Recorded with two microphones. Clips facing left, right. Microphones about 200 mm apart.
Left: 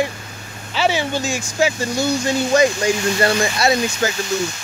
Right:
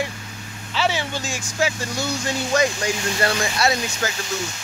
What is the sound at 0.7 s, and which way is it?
Speech, 5° left (ahead or behind).